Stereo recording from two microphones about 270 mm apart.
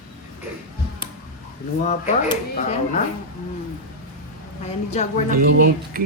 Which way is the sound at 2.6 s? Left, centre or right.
Left.